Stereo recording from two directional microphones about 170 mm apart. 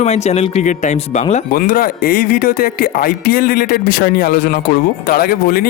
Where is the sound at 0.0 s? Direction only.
40° left (ahead or behind).